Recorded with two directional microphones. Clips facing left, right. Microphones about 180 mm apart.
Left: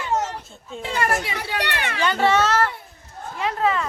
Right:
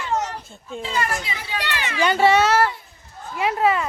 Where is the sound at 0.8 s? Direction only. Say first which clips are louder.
Left 2 dB; 60° left (ahead or behind).